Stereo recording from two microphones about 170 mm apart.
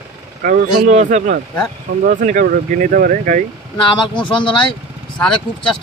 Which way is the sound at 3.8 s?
30° left (ahead or behind).